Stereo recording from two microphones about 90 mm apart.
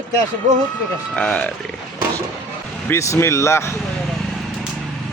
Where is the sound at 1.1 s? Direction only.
10° left (ahead or behind).